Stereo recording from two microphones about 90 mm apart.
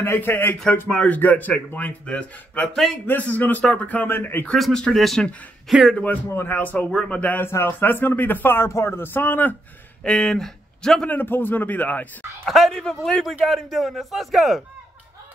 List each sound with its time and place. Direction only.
0.0 s a man's voice: 25° left (ahead or behind)
4.5 s a man's voice: 5° left (ahead or behind)
6.2 s a man's voice: 25° left (ahead or behind)
10.0 s speech: 5° left (ahead or behind)
11.1 s speech: 20° left (ahead or behind)
12.4 s a man's voice: centre (ahead or behind)